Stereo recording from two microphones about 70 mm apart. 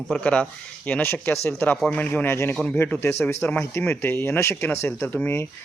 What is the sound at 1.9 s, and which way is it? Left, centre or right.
Speech, left.